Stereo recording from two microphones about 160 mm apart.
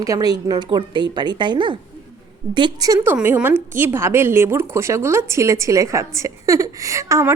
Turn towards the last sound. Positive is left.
turn(degrees=-20)  # may be behind; listen again after turning